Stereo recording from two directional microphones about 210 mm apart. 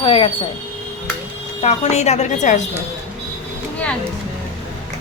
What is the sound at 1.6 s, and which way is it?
A woman's voice, 35° left (ahead or behind).